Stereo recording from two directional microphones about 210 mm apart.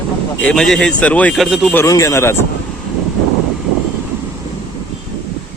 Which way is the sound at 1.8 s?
15° left (ahead or behind).